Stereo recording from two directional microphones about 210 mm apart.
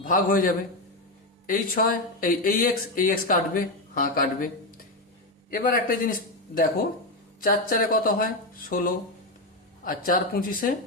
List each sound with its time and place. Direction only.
0.0 s speech: 40° left (ahead or behind)
5.5 s speech: 40° left (ahead or behind)